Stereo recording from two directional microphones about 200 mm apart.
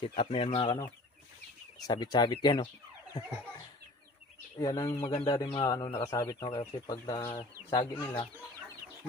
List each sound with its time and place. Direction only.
0.0 s speech: 25° left (ahead or behind)
1.9 s speech: 20° left (ahead or behind)
4.6 s speech: 15° left (ahead or behind)
7.2 s speech: 15° left (ahead or behind)